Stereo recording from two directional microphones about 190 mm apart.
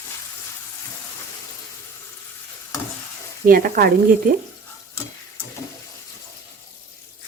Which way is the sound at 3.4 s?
50° right (ahead or behind).